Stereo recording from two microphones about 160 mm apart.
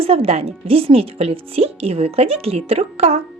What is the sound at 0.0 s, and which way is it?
Speech, 35° right (ahead or behind).